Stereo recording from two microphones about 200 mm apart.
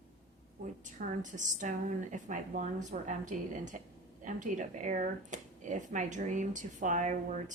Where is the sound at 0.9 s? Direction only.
40° right (ahead or behind).